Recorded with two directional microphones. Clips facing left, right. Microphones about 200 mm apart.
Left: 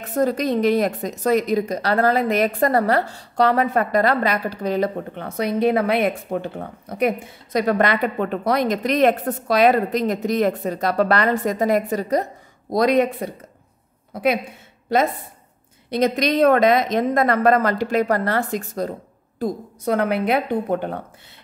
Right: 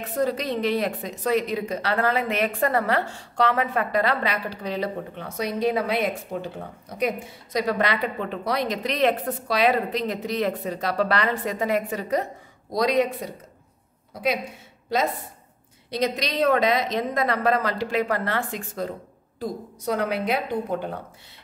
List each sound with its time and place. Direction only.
0.1 s a woman's voice: 45° left (ahead or behind)
12.7 s a woman's voice: 55° left (ahead or behind)
15.9 s a woman's voice: 55° left (ahead or behind)
19.4 s speech: 55° left (ahead or behind)